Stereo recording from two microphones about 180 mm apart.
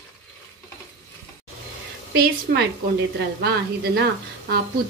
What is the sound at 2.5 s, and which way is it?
Speech, 55° right (ahead or behind).